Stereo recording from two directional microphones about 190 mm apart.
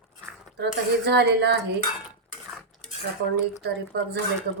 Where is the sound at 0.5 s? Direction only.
60° right (ahead or behind).